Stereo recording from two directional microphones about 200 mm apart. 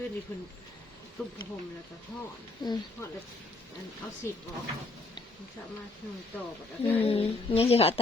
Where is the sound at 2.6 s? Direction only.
20° left (ahead or behind).